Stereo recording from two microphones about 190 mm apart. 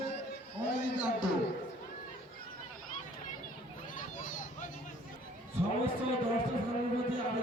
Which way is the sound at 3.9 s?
45° left (ahead or behind).